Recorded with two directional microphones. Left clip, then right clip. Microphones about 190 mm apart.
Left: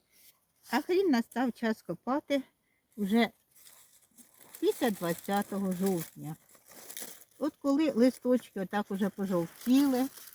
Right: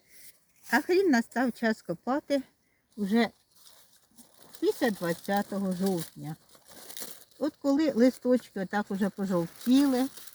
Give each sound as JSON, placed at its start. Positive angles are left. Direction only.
{"t": 0.6, "sound": "speech", "side_deg": -25}
{"t": 3.0, "sound": "speech", "side_deg": 10}
{"t": 4.4, "sound": "speech", "side_deg": 10}